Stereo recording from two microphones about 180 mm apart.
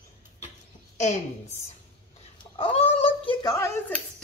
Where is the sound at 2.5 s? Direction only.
35° left (ahead or behind).